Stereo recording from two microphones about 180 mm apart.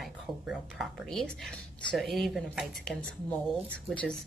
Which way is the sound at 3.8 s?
5° left (ahead or behind).